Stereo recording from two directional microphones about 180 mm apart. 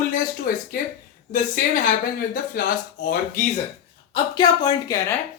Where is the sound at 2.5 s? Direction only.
55° left (ahead or behind).